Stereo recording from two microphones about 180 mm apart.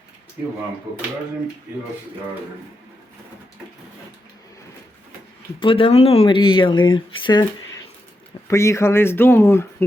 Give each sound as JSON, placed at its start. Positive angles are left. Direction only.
{"t": 5.5, "sound": "speech", "side_deg": 30}
{"t": 8.4, "sound": "speech", "side_deg": 15}